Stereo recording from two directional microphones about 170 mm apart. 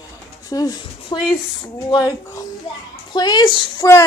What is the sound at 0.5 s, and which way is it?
Speech, 20° left (ahead or behind).